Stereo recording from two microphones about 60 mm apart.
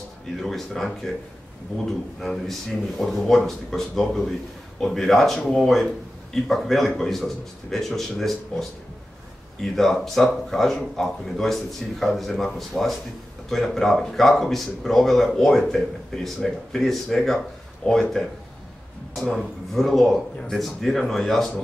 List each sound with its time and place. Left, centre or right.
0.4 s speech: centre
17.8 s speech: centre
19.2 s speech: centre